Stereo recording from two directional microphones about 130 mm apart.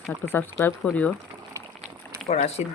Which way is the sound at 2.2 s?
55° left (ahead or behind).